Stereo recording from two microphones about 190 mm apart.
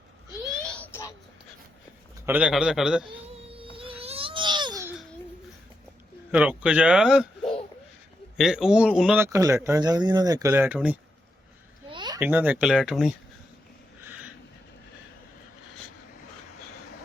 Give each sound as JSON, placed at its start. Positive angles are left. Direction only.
{"t": 0.6, "sound": "a sound", "side_deg": 5}
{"t": 2.2, "sound": "speech", "side_deg": -10}
{"t": 3.5, "sound": "music", "side_deg": -30}
{"t": 6.3, "sound": "speech", "side_deg": -5}
{"t": 9.2, "sound": "speech", "side_deg": -15}
{"t": 11.9, "sound": "a sound", "side_deg": -25}
{"t": 12.2, "sound": "speech", "side_deg": -10}